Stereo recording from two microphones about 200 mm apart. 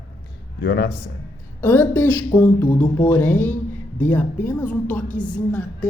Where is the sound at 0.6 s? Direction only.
55° left (ahead or behind).